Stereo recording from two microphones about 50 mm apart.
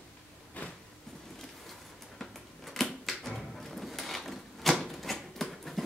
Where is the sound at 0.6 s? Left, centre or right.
Left.